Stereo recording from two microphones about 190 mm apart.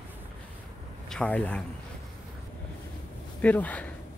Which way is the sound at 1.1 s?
5° left (ahead or behind).